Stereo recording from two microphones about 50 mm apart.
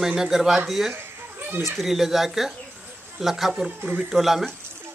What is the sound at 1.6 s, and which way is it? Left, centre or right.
Speech, centre.